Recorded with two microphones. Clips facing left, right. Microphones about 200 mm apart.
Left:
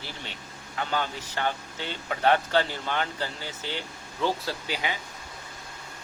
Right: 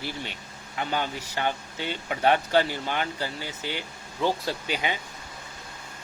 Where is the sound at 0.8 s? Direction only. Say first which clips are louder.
Right 1 dB; 15° right (ahead or behind).